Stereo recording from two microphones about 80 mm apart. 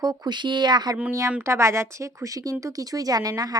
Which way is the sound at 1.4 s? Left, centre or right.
Right.